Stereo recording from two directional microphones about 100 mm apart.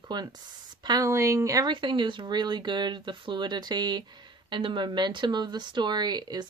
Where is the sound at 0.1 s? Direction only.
45° right (ahead or behind).